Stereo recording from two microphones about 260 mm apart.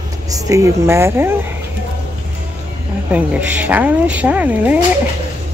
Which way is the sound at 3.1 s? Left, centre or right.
Centre.